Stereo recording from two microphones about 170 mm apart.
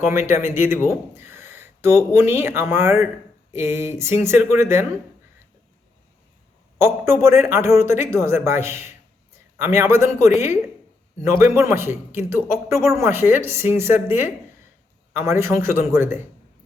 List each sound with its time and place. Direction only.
0.3 s speech: 15° right (ahead or behind)
6.7 s speech: 15° right (ahead or behind)